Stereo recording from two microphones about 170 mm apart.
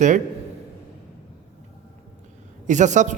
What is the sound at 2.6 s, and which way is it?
Speech, 45° right (ahead or behind).